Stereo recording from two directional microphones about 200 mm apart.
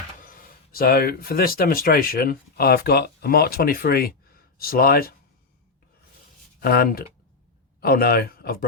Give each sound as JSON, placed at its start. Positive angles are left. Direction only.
{"t": 0.2, "sound": "speech", "side_deg": 45}
{"t": 6.6, "sound": "speech", "side_deg": 50}